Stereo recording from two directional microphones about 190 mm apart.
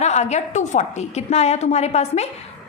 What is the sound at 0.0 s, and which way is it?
A woman's voice, 35° left (ahead or behind).